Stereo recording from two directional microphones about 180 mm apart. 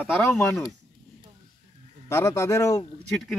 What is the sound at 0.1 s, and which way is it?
Speech, centre (ahead or behind).